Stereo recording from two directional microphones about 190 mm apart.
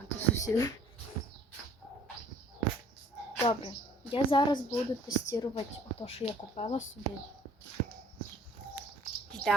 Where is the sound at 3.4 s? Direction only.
25° left (ahead or behind).